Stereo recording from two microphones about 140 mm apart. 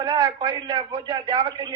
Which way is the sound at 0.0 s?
30° right (ahead or behind).